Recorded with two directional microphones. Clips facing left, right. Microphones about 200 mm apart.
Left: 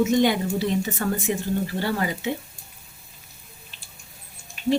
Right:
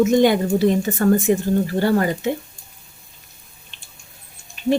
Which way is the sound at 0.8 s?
45° right (ahead or behind).